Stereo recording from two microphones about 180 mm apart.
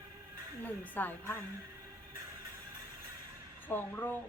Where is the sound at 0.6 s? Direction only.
10° left (ahead or behind).